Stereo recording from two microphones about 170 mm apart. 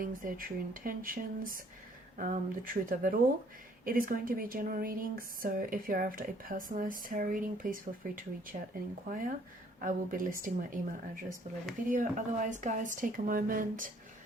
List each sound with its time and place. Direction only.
0.0 s speech: 55° right (ahead or behind)